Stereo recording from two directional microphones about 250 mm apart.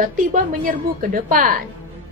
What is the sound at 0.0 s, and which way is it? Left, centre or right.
A woman's voice, right.